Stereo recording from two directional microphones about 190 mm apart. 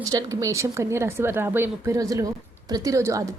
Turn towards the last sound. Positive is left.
turn(degrees=-15)  # may be behind; listen again after turning